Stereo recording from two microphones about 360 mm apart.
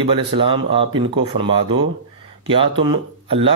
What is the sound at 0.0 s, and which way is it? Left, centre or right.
Speech, centre.